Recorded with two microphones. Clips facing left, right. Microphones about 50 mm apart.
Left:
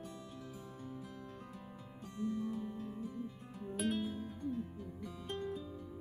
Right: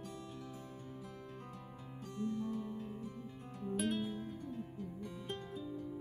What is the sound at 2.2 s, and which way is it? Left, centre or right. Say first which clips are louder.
Music: left 1 dB; centre.